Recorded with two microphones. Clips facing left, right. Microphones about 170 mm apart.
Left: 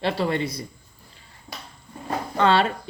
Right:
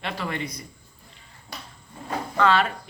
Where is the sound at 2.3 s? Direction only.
30° left (ahead or behind).